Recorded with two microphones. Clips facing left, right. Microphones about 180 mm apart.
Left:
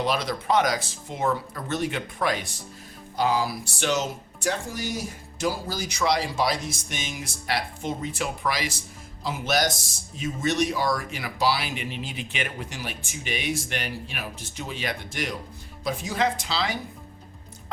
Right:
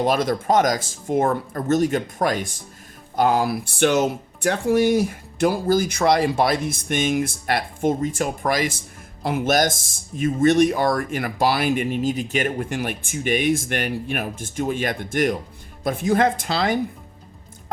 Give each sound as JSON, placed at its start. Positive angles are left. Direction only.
{"t": 0.0, "sound": "speech", "side_deg": -50}